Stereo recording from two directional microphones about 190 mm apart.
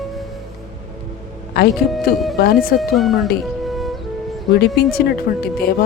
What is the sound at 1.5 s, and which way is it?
Speech, 55° left (ahead or behind).